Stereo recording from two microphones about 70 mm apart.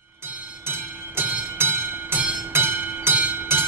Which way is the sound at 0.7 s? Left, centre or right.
Right.